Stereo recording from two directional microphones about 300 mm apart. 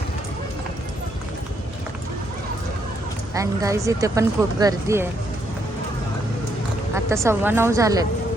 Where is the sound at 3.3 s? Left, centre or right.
Centre.